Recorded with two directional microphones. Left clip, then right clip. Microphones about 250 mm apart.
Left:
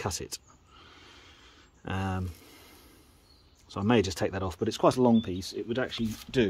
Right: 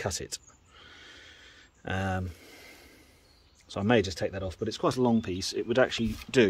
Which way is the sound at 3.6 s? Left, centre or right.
Centre.